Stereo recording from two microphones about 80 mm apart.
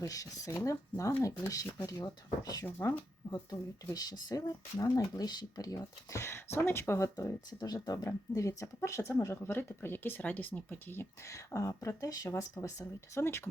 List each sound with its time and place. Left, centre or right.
0.0 s speech: left
2.6 s speech: left
7.6 s speech: left
13.2 s speech: left